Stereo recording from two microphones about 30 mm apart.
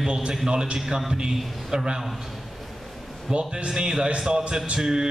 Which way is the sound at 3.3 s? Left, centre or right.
Right.